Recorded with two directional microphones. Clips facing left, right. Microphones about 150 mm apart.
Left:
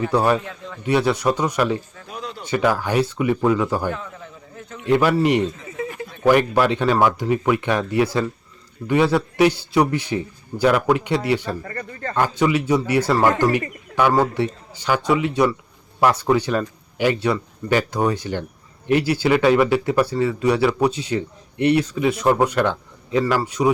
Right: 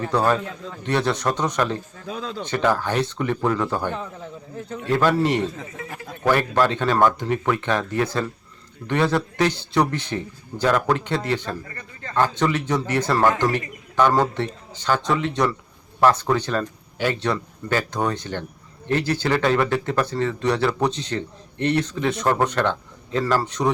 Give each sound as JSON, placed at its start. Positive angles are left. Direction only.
{"t": 0.0, "sound": "a man's voice", "side_deg": 10}
{"t": 3.9, "sound": "a man's voice", "side_deg": -30}
{"t": 4.9, "sound": "a man's voice", "side_deg": 10}
{"t": 11.6, "sound": "speech", "side_deg": 55}
{"t": 12.1, "sound": "a man's voice", "side_deg": 10}